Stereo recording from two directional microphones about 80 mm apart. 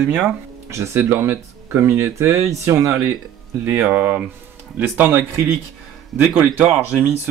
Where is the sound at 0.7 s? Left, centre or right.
Right.